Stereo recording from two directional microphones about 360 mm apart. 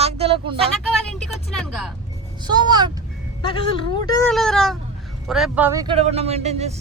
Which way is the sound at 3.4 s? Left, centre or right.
Centre.